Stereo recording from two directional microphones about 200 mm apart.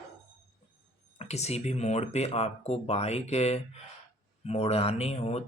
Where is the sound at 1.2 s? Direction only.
35° left (ahead or behind).